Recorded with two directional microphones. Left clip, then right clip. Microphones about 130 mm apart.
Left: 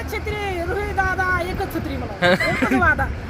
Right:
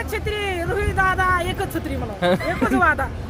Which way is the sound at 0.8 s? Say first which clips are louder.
Right 2 dB; 40° right (ahead or behind).